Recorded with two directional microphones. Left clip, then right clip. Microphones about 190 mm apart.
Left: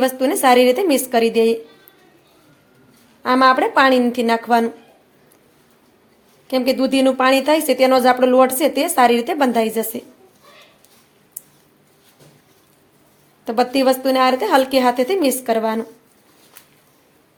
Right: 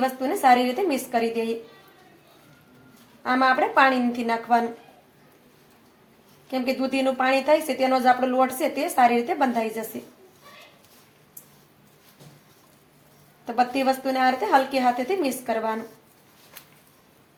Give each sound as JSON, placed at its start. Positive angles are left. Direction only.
{"t": 0.0, "sound": "a woman's voice", "side_deg": 60}
{"t": 3.2, "sound": "a woman's voice", "side_deg": 65}
{"t": 6.5, "sound": "a woman's voice", "side_deg": 60}
{"t": 13.4, "sound": "a woman's voice", "side_deg": 65}